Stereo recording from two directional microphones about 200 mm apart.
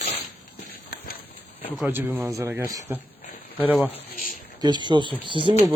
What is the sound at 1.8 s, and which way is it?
A man's voice, 10° right (ahead or behind).